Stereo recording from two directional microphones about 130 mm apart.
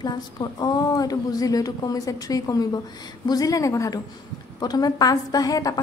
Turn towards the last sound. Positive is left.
turn(degrees=30)  # may be behind; listen again after turning